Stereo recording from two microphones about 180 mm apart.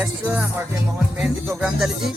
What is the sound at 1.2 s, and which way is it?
Music, centre (ahead or behind).